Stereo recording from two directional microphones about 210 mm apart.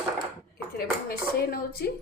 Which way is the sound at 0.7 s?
45° left (ahead or behind).